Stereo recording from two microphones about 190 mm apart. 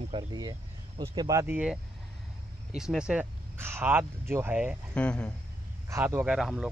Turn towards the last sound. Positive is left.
turn(degrees=-5)  # may be behind; listen again after turning